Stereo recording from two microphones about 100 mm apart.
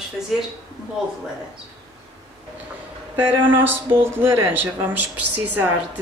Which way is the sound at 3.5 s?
20° right (ahead or behind).